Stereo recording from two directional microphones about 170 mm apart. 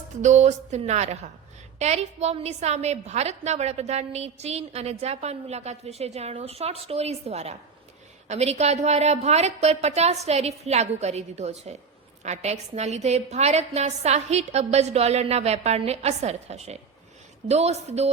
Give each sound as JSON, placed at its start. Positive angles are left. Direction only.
{"t": 0.2, "sound": "a woman's voice", "side_deg": -45}